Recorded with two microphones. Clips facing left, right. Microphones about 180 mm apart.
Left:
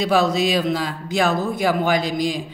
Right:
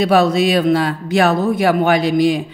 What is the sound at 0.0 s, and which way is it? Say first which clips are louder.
A man's voice: right 5 dB; 60° right (ahead or behind).